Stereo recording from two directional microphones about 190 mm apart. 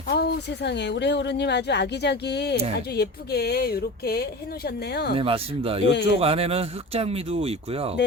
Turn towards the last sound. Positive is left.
turn(degrees=-30)  # may be behind; listen again after turning